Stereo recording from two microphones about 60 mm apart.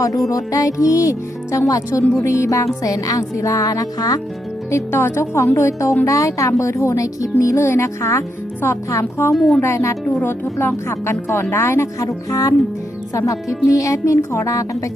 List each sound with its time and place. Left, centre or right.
0.3 s speech: left
2.2 s speech: left
2.8 s speech: left
4.7 s a woman's voice: left
6.1 s a woman's voice: left
9.3 s speech: centre
9.6 s a woman's voice: left
10.2 s speech: left
10.8 s a woman's voice: left
12.3 s speech: left